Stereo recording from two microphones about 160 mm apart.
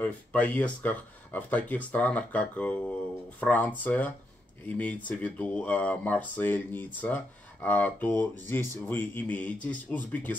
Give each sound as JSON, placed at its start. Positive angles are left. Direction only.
{"t": 0.0, "sound": "speech", "side_deg": 10}